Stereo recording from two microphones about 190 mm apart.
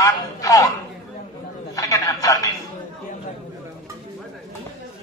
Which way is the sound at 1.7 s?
15° left (ahead or behind).